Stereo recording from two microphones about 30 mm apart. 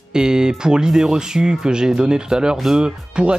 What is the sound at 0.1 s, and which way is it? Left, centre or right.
Speech, right.